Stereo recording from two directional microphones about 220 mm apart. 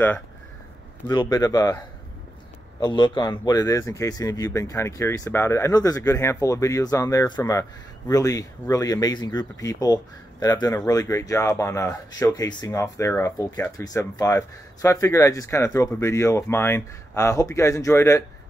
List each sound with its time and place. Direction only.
1.0 s speech: 20° left (ahead or behind)
2.8 s speech: 20° left (ahead or behind)